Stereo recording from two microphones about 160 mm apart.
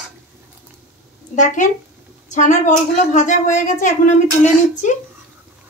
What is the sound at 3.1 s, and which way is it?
Speech, 55° left (ahead or behind).